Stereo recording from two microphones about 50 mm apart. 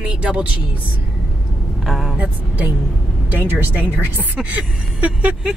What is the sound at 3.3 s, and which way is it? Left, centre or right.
Speech, right.